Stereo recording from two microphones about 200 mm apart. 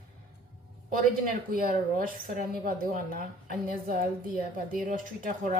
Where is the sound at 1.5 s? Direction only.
45° right (ahead or behind).